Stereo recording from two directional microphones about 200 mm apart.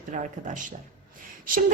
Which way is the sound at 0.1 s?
40° right (ahead or behind).